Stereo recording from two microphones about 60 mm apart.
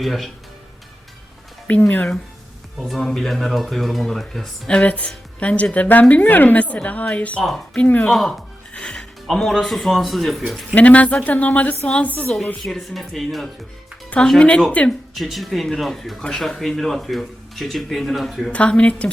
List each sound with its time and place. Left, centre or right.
0.0 s speech: centre
1.7 s a woman's voice: left
2.8 s speech: centre
4.7 s a woman's voice: left
7.4 s speech: centre
7.8 s a woman's voice: left
8.1 s speech: centre
8.7 s music: centre
9.2 s speech: centre
10.8 s a woman's voice: left
12.6 s speech: centre
14.3 s a woman's voice: centre
15.1 s speech: centre
18.5 s a woman's voice: left